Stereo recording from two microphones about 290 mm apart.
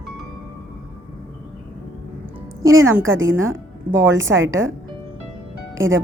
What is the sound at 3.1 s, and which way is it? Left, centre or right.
Speech, right.